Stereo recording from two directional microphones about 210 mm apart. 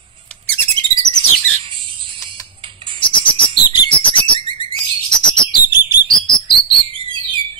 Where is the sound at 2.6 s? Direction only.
25° right (ahead or behind).